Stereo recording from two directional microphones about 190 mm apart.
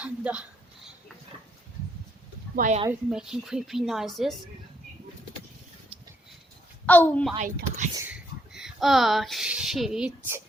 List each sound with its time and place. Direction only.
0.0 s speech: 5° right (ahead or behind)
2.6 s speech: 40° right (ahead or behind)
2.9 s a woman's voice: 5° right (ahead or behind)
6.8 s a woman's voice: 10° left (ahead or behind)
7.9 s speech: 10° right (ahead or behind)